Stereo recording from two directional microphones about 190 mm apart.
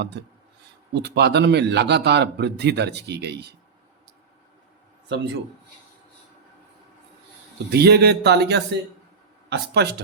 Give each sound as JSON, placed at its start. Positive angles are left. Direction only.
{"t": 0.1, "sound": "a man's voice", "side_deg": -60}
{"t": 5.0, "sound": "a man's voice", "side_deg": -65}
{"t": 7.7, "sound": "a man's voice", "side_deg": -60}